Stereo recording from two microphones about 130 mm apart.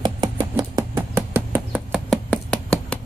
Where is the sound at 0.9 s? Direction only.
15° right (ahead or behind).